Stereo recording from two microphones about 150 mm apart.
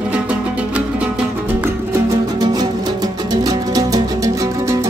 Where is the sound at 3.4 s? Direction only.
25° right (ahead or behind).